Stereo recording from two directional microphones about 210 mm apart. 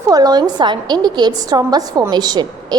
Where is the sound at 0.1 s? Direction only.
20° right (ahead or behind).